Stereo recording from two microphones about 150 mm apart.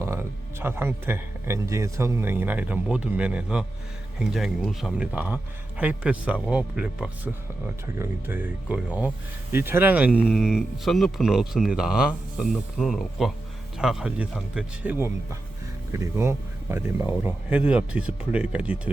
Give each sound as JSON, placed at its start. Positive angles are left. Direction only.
{"t": 0.6, "sound": "a man's voice", "side_deg": -15}
{"t": 14.9, "sound": "a man's voice", "side_deg": -20}